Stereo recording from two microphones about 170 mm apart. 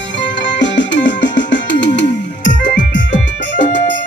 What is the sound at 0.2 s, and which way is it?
Music, 90° left.